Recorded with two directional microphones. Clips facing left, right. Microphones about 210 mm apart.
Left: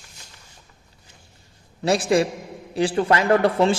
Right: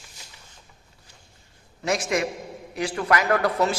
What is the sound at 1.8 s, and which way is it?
A man's voice, 30° left (ahead or behind).